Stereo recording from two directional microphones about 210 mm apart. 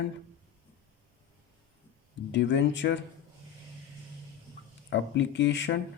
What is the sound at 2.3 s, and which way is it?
Speech, 60° left (ahead or behind).